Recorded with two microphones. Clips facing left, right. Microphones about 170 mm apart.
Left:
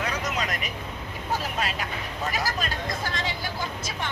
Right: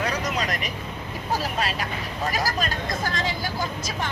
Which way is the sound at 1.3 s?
35° right (ahead or behind).